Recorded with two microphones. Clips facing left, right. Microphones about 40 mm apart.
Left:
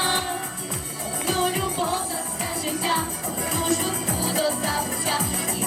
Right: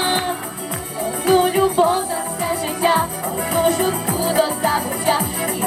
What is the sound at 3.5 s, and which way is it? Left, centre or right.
Music, right.